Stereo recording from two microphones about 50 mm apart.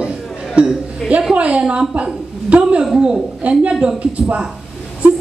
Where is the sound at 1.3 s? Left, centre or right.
Right.